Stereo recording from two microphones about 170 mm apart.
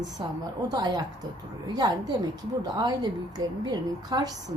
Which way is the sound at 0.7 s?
25° right (ahead or behind).